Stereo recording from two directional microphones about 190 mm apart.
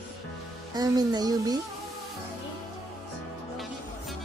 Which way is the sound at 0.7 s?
20° right (ahead or behind).